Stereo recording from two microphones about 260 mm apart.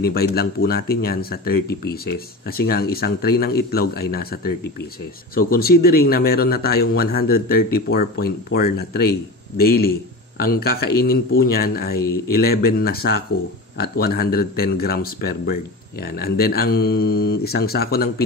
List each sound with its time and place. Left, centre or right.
0.0 s speech: left